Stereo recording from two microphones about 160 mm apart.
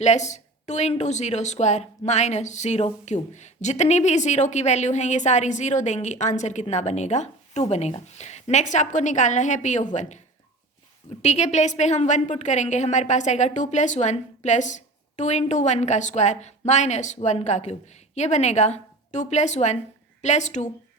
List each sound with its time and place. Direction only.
0.0 s speech: 45° left (ahead or behind)
11.2 s speech: 45° left (ahead or behind)